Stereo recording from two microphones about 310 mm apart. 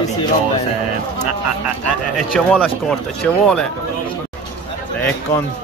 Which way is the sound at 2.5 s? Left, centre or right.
Centre.